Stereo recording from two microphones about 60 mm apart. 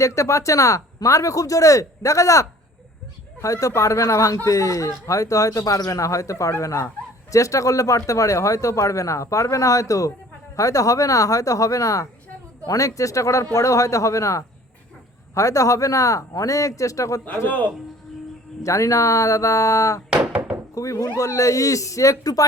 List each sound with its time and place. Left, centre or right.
0.0 s speech: left
18.6 s speech: left
20.1 s thunk: centre
20.7 s speech: left